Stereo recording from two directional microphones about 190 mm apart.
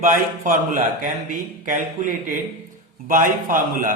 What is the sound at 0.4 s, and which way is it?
A man's voice, 45° right (ahead or behind).